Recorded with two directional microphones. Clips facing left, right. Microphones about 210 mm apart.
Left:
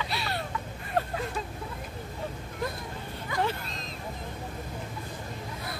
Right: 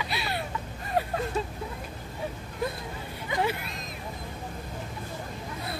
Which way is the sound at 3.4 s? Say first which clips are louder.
Right 1 dB; 10° right (ahead or behind).